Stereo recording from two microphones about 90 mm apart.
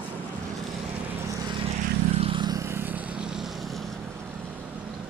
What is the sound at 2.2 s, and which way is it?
Vehicle, 90° right.